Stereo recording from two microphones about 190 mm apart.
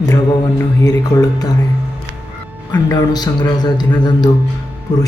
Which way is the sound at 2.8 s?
20° left (ahead or behind).